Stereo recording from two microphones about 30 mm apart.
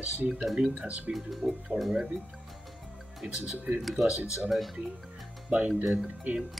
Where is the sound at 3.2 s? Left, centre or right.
Right.